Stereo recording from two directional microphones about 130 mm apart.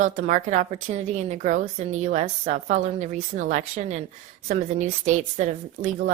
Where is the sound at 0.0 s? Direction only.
70° right (ahead or behind).